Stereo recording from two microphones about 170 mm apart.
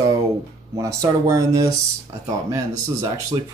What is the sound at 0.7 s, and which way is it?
Speech, 20° right (ahead or behind).